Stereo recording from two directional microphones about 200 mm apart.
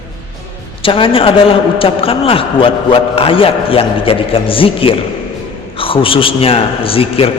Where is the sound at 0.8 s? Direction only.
25° left (ahead or behind).